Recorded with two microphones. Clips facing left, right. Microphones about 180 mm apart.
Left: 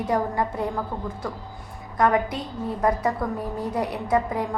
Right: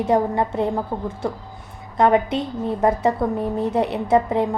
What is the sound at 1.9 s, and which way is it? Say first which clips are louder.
A woman's voice: right 4 dB; 25° right (ahead or behind).